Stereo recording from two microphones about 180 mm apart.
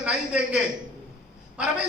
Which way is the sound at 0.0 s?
5° right (ahead or behind).